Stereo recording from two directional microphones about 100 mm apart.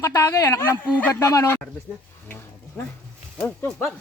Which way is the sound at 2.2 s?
20° left (ahead or behind).